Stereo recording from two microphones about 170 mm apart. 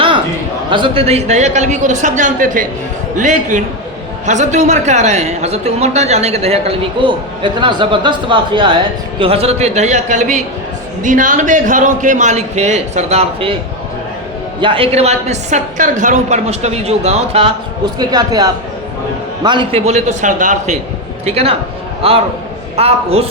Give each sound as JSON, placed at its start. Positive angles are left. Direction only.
{"t": 0.7, "sound": "a man's voice", "side_deg": -30}
{"t": 14.6, "sound": "speech", "side_deg": -30}
{"t": 18.0, "sound": "speech", "side_deg": -25}
{"t": 21.2, "sound": "speech", "side_deg": -35}